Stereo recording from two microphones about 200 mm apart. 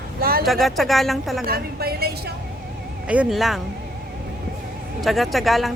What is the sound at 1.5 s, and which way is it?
Speech, 50° right (ahead or behind).